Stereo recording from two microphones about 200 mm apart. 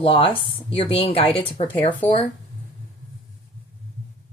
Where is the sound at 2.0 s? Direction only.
10° left (ahead or behind).